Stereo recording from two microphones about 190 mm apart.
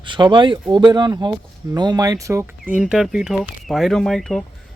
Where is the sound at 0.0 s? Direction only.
25° right (ahead or behind).